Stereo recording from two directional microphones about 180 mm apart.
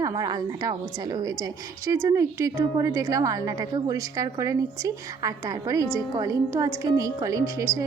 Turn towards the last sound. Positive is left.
turn(degrees=-15)  # may be behind; listen again after turning